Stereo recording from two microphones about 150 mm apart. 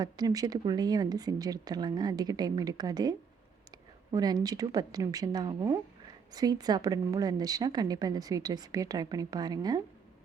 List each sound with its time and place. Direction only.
0.0 s a woman's voice: 25° right (ahead or behind)